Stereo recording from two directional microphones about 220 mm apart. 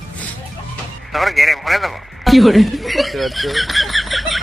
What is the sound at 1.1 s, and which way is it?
A man's voice, centre (ahead or behind).